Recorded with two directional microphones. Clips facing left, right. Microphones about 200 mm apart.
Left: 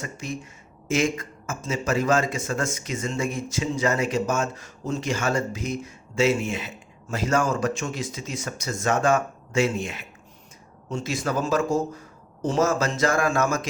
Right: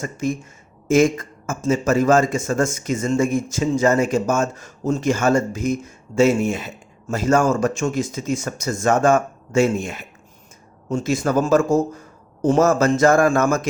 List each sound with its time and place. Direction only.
0.0 s a man's voice: 45° right (ahead or behind)